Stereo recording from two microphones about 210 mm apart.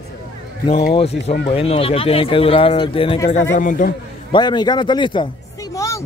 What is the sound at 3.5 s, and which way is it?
Speech, 40° left (ahead or behind).